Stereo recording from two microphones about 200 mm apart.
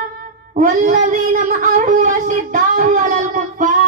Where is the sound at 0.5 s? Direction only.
40° right (ahead or behind).